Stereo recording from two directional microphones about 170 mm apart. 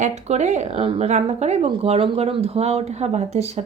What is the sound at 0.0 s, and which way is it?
A woman's voice, 40° right (ahead or behind).